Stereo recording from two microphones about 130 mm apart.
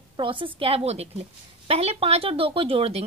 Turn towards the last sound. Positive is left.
turn(degrees=-45)  # may be behind; listen again after turning